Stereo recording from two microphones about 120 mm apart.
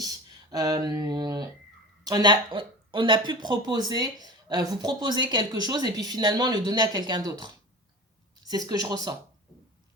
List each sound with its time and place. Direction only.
0.0 s speech: 30° right (ahead or behind)